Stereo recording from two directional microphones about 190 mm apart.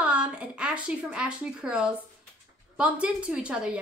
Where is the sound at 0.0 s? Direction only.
5° right (ahead or behind).